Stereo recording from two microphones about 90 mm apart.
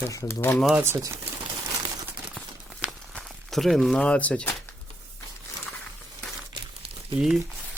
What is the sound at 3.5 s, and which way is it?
Speech, centre (ahead or behind).